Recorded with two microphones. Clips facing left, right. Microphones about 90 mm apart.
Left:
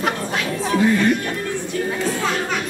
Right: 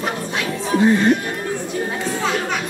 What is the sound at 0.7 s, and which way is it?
Speech, 25° right (ahead or behind).